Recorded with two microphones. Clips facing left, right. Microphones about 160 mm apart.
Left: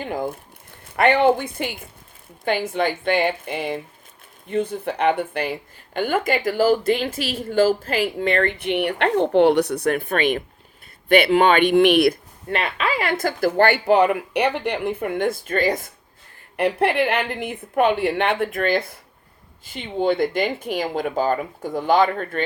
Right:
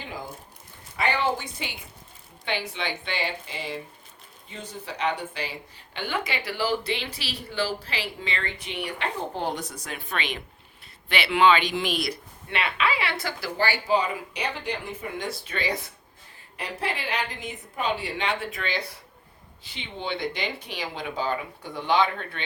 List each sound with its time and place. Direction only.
0.0 s speech: 55° left (ahead or behind)
16.6 s speech: 60° left (ahead or behind); by 22.4 s 45° left (ahead or behind)